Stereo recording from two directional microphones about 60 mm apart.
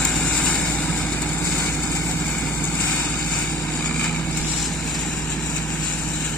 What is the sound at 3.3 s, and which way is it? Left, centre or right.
Vehicle, centre.